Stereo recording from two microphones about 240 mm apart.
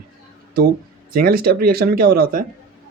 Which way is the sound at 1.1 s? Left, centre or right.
Right.